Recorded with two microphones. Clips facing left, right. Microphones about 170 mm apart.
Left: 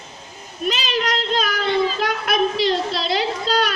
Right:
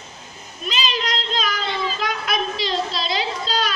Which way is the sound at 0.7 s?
60° left (ahead or behind).